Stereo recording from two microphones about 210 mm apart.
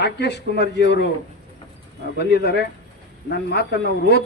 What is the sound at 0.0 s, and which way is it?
A man's voice, 55° left (ahead or behind).